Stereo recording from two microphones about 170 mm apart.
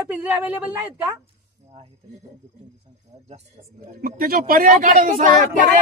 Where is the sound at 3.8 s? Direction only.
60° right (ahead or behind).